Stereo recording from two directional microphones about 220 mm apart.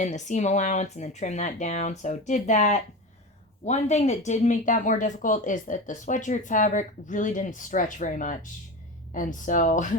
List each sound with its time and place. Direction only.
0.0 s speech: 35° left (ahead or behind)